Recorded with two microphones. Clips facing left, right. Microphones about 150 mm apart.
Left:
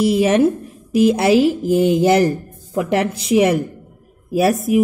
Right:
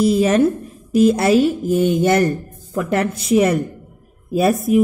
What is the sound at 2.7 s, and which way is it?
A woman's voice, 10° left (ahead or behind).